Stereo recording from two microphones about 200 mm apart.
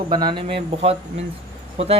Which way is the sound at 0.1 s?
20° right (ahead or behind).